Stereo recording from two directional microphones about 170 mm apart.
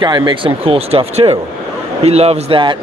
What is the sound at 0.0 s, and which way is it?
A man's voice, 25° right (ahead or behind).